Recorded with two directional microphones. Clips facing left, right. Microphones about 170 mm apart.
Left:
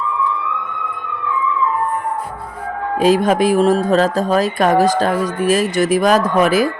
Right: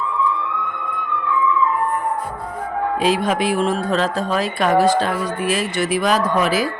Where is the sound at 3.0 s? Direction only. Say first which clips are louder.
Left 7 dB; 45° left (ahead or behind).